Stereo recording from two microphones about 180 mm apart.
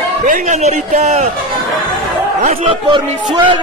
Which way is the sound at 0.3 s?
40° right (ahead or behind).